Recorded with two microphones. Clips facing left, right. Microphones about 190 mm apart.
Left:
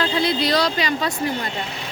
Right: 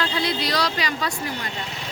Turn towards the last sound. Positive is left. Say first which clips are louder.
# left 4 dB
turn(degrees=25)  # may be behind; listen again after turning